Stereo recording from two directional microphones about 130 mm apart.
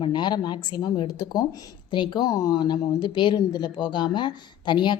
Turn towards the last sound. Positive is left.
turn(degrees=35)  # may be behind; listen again after turning